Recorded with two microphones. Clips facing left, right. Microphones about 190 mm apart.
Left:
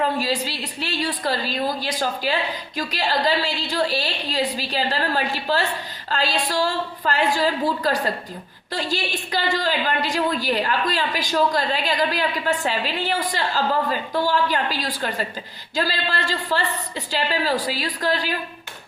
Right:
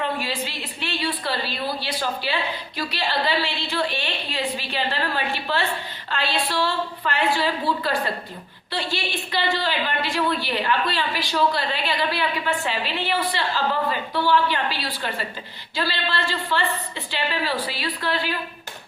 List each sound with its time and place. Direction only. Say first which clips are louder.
0.0 s a woman's voice: left 4 dB; 40° left (ahead or behind)